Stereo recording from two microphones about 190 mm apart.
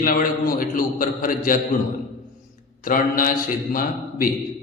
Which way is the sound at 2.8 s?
45° left (ahead or behind).